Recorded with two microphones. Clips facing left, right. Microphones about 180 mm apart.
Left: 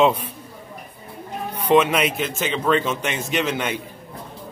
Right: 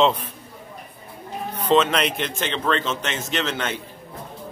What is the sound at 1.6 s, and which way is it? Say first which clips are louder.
A man's voice: left 2 dB; 15° left (ahead or behind).